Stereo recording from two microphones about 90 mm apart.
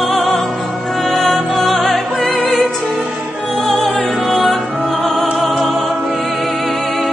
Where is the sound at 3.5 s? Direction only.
5° left (ahead or behind).